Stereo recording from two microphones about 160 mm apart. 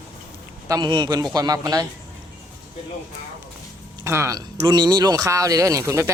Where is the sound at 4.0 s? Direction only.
20° right (ahead or behind).